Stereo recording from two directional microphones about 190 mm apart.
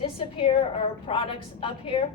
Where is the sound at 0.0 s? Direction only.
30° left (ahead or behind).